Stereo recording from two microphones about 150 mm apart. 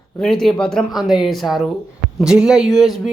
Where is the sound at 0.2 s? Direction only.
5° left (ahead or behind).